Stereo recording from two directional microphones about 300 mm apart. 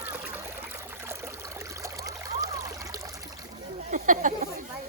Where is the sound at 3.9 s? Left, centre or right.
Right.